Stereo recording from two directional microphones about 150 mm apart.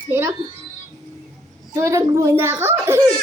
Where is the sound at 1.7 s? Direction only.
20° right (ahead or behind).